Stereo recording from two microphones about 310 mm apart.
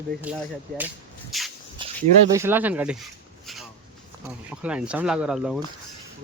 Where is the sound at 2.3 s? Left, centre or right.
Centre.